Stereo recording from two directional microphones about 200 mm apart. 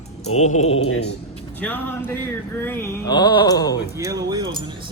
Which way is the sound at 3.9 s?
15° right (ahead or behind).